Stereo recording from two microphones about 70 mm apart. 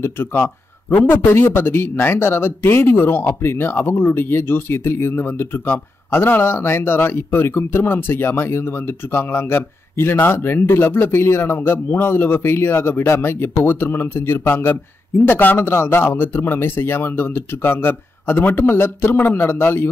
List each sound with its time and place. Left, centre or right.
0.0 s a man's voice: left